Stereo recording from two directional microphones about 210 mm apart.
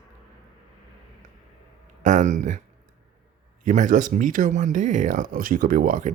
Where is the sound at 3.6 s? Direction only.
35° right (ahead or behind).